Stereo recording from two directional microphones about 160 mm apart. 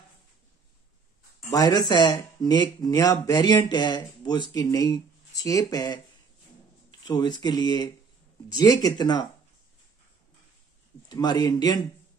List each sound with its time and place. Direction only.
1.5 s speech: 25° left (ahead or behind)
11.1 s speech: 25° left (ahead or behind)